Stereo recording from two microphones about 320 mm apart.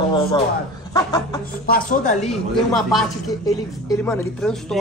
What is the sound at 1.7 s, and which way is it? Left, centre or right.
Speech, left.